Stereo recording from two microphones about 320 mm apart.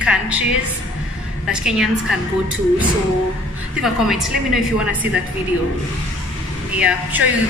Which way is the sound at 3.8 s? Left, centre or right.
Centre.